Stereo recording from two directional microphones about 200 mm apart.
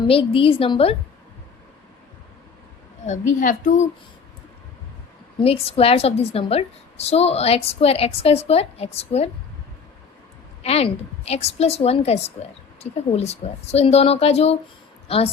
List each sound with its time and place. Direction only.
0.1 s a woman's voice: 25° left (ahead or behind)
3.1 s a woman's voice: 40° left (ahead or behind)
5.4 s a woman's voice: 30° left (ahead or behind)
10.6 s a woman's voice: 30° left (ahead or behind)